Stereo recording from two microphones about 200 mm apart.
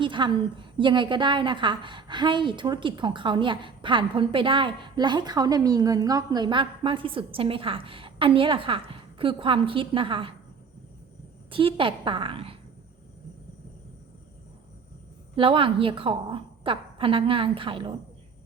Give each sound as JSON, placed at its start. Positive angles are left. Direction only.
{"t": 0.0, "sound": "a woman's voice", "side_deg": -25}
{"t": 11.5, "sound": "a woman's voice", "side_deg": -25}
{"t": 15.4, "sound": "a woman's voice", "side_deg": -25}